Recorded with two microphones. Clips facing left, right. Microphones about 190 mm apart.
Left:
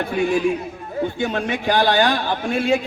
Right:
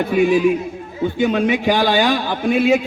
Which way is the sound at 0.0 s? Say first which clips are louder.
Right 5 dB; 15° right (ahead or behind).